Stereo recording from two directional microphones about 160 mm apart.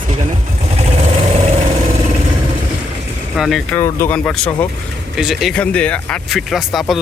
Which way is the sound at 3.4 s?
Centre (ahead or behind).